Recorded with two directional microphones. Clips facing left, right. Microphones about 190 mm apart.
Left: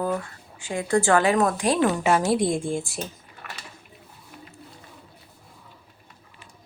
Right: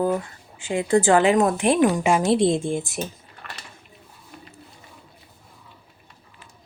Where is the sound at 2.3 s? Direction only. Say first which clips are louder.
Right 3 dB; 25° right (ahead or behind).